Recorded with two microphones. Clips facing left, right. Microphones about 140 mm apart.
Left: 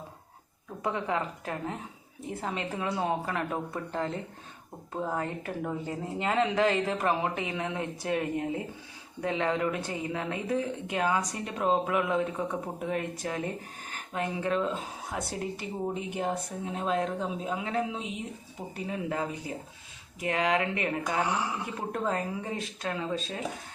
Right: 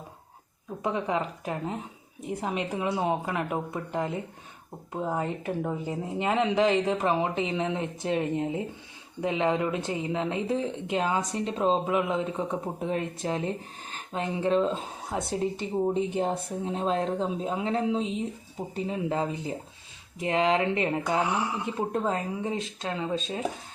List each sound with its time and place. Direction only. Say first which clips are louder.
0.8 s speech: right 2 dB; 20° right (ahead or behind)